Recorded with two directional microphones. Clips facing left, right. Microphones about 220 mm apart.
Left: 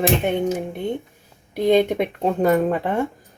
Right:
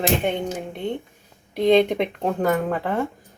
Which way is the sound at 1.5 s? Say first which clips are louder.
Even; 5° left (ahead or behind).